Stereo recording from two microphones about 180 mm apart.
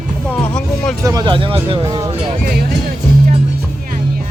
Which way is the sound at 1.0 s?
20° right (ahead or behind).